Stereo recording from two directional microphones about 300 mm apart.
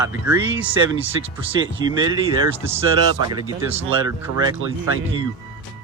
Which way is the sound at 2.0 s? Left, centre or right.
Centre.